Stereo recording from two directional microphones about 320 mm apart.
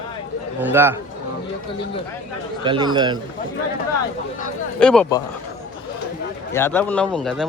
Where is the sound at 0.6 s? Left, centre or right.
Centre.